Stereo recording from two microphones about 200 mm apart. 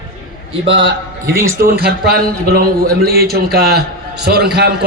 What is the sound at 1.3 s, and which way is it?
Speech, 15° right (ahead or behind).